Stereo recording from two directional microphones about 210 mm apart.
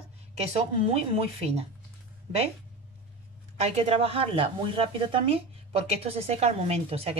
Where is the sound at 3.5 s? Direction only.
30° right (ahead or behind).